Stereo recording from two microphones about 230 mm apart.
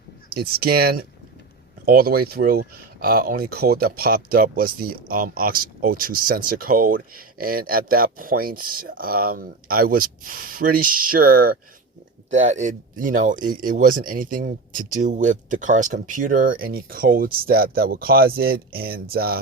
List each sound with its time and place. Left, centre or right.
0.3 s speech: right